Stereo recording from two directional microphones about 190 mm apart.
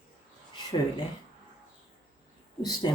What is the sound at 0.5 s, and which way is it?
Speech, 25° left (ahead or behind).